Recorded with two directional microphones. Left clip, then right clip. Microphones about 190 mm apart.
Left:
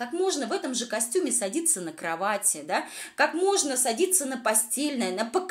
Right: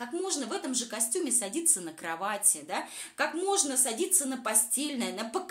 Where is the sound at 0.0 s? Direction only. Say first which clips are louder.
Left 6 dB; 15° left (ahead or behind).